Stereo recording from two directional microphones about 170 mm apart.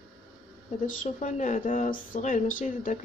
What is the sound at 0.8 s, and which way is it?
A woman's voice, 50° left (ahead or behind).